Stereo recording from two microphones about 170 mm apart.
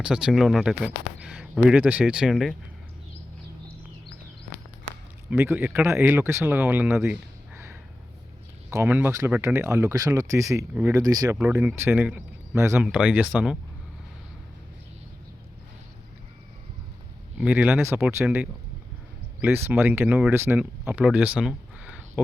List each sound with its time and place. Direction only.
0.0 s speech: 5° right (ahead or behind)
5.3 s speech: 15° right (ahead or behind)
10.8 s speech: 10° right (ahead or behind)
11.0 s speech: 20° right (ahead or behind)
11.3 s speech: 10° right (ahead or behind)
17.3 s speech: 10° right (ahead or behind)